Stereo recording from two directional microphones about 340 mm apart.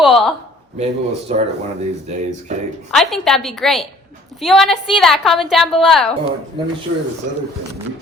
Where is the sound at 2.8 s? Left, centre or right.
Centre.